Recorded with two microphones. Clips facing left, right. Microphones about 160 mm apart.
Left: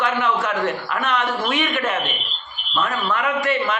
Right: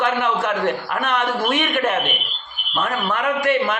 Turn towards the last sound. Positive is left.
turn(degrees=-50)  # may be behind; listen again after turning